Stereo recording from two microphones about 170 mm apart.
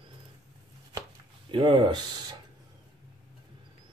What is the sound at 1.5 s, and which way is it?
Speech, 30° right (ahead or behind).